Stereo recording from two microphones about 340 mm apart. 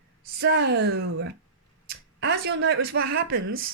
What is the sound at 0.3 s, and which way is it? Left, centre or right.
Speech, right.